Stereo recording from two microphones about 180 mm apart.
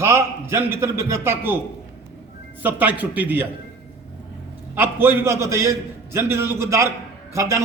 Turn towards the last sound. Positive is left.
turn(degrees=-15)  # may be behind; listen again after turning